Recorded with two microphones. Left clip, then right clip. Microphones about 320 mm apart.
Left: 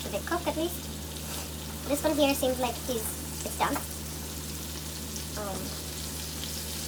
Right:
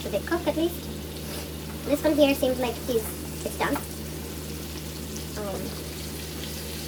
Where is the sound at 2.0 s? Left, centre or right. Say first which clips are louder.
Right 4 dB; centre.